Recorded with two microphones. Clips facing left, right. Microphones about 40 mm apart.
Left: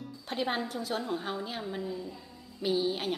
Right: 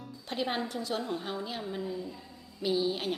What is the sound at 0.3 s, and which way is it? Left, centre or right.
A woman's voice, centre.